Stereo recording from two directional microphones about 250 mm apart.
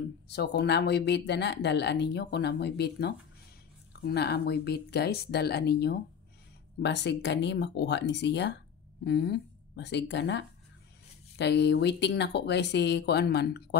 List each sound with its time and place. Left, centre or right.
0.3 s speech: left